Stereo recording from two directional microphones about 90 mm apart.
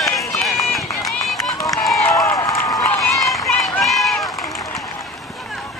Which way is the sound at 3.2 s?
Centre (ahead or behind).